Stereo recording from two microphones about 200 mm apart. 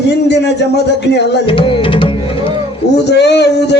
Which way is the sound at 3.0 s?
55° left (ahead or behind).